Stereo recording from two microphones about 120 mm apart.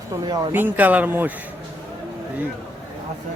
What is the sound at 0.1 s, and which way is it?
Speech, 35° right (ahead or behind).